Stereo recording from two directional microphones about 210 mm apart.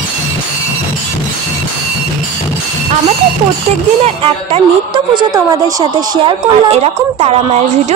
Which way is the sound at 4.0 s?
25° right (ahead or behind).